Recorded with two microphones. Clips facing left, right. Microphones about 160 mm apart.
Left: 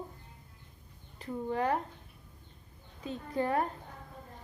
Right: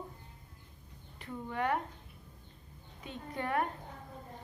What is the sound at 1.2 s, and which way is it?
Speech, 30° left (ahead or behind).